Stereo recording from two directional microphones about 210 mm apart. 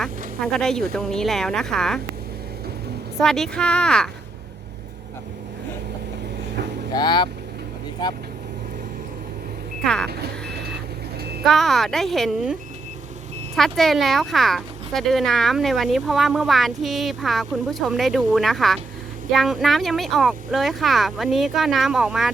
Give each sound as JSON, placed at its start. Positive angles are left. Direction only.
{"t": 0.0, "sound": "a sound", "side_deg": 0}
{"t": 0.9, "sound": "speech", "side_deg": 0}
{"t": 3.2, "sound": "speech", "side_deg": 0}
{"t": 6.9, "sound": "speech", "side_deg": 20}
{"t": 9.8, "sound": "speech", "side_deg": 5}
{"t": 11.4, "sound": "speech", "side_deg": 0}
{"t": 13.6, "sound": "speech", "side_deg": 0}